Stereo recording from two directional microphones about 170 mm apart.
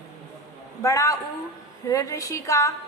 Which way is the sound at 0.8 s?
20° left (ahead or behind).